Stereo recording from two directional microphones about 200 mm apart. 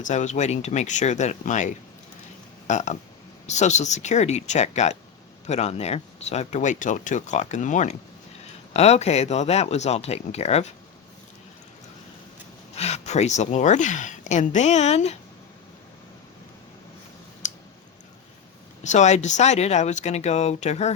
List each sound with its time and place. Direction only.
0.0 s speech: 35° left (ahead or behind)
12.7 s speech: 35° left (ahead or behind)
17.4 s clicking: 40° left (ahead or behind)
18.8 s speech: 35° left (ahead or behind)